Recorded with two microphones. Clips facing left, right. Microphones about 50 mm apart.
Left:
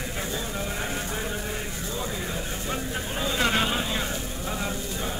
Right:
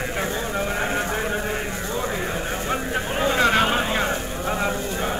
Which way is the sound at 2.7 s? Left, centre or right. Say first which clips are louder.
Right 6 dB; right.